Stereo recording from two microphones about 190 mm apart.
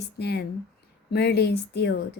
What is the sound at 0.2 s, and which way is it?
Speech, 60° left (ahead or behind).